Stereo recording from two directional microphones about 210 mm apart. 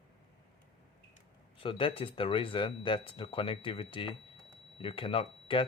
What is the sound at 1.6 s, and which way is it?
Speech, 25° left (ahead or behind).